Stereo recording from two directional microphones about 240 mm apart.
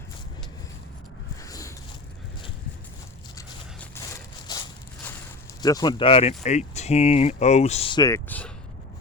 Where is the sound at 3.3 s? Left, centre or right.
Centre.